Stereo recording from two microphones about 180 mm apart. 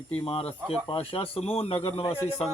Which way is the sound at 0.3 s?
30° left (ahead or behind).